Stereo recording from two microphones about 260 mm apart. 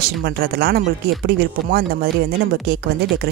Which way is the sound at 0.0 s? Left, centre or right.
Right.